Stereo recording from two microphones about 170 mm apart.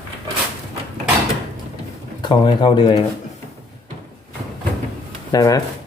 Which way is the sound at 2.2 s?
25° left (ahead or behind).